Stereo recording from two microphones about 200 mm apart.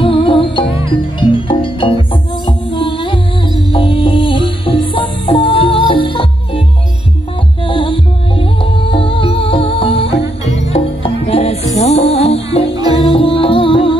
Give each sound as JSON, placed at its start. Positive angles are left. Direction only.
{"t": 0.0, "sound": "music", "side_deg": 25}
{"t": 7.6, "sound": "music", "side_deg": 25}